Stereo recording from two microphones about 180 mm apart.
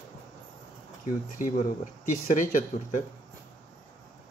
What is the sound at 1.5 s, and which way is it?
Speech, 40° left (ahead or behind).